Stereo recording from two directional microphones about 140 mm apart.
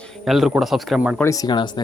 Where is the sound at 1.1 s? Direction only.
20° left (ahead or behind).